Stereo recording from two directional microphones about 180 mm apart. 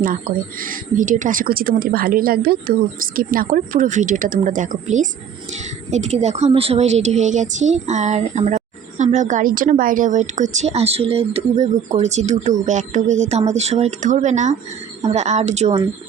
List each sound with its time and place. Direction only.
0.6 s a woman's voice: 50° right (ahead or behind)